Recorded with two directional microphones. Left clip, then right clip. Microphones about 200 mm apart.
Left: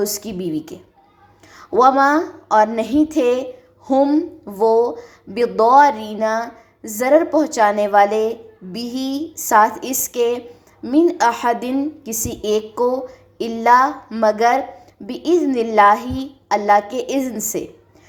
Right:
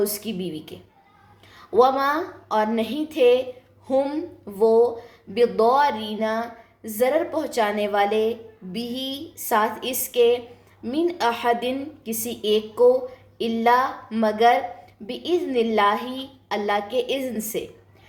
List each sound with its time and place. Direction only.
0.0 s speech: 25° left (ahead or behind)